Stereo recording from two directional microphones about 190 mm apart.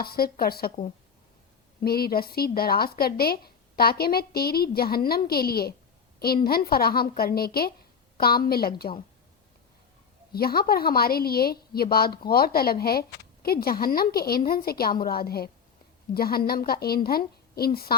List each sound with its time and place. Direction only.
0.0 s a woman's voice: 55° left (ahead or behind)
1.8 s a woman's voice: 55° left (ahead or behind)
10.3 s a woman's voice: 55° left (ahead or behind)